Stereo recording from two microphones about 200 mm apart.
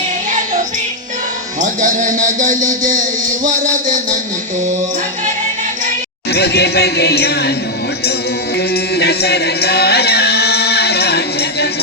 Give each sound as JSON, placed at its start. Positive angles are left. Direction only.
{"t": 1.6, "sound": "speech", "side_deg": -40}
{"t": 3.4, "sound": "music", "side_deg": -40}
{"t": 6.3, "sound": "speech", "side_deg": 55}
{"t": 8.7, "sound": "music", "side_deg": 55}